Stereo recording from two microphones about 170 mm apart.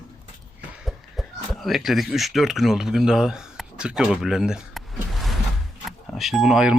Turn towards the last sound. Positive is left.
turn(degrees=-5)  # may be behind; listen again after turning